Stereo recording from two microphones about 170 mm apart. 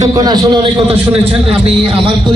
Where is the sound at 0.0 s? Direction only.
25° right (ahead or behind).